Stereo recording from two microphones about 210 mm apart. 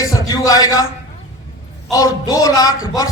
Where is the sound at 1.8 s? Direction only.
15° left (ahead or behind).